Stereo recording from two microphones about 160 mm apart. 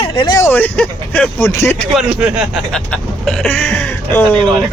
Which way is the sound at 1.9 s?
5° right (ahead or behind).